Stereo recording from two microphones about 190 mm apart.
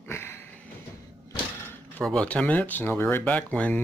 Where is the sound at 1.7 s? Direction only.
5° left (ahead or behind).